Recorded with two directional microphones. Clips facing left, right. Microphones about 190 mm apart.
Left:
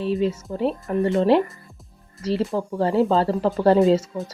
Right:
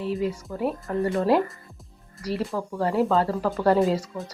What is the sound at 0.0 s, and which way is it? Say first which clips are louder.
Speech: left 4 dB; 25° left (ahead or behind).